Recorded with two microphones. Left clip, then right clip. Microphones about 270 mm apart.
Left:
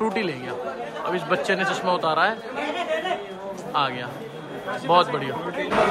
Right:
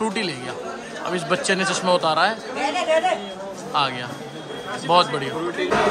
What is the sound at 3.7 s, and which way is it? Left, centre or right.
A man's voice, centre.